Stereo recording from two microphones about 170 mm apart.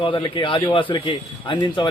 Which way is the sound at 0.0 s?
25° left (ahead or behind).